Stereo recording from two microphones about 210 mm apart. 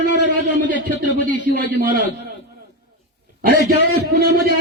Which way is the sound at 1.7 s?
40° right (ahead or behind).